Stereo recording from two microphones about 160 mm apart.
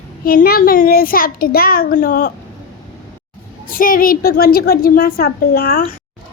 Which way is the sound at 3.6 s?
60° left (ahead or behind).